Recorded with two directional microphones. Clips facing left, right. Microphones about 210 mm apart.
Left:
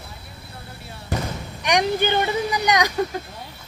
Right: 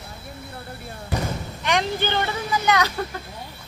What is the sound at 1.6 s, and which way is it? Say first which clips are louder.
Speech: left 3 dB; 15° left (ahead or behind).